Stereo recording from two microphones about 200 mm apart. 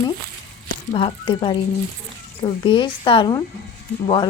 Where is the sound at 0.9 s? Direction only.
25° left (ahead or behind).